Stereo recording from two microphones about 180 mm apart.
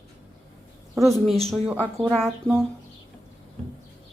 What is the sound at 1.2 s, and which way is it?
Speech, centre (ahead or behind).